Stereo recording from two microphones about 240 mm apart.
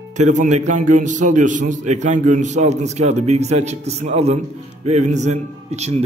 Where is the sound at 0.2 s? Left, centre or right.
Right.